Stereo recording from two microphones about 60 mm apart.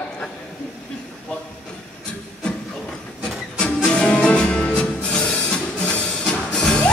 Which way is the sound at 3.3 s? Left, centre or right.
Centre.